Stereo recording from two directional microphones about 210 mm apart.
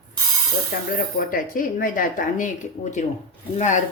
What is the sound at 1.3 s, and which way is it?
Speech, 40° left (ahead or behind).